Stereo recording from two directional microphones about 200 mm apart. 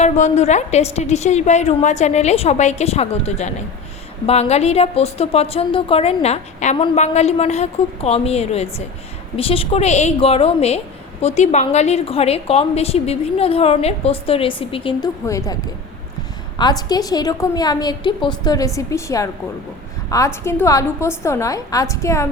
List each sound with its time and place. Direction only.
0.0 s a woman's voice: 35° left (ahead or behind)
15.3 s a woman's voice: 15° left (ahead or behind)
16.6 s a woman's voice: 20° left (ahead or behind)